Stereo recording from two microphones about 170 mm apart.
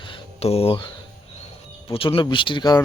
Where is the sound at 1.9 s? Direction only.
35° left (ahead or behind).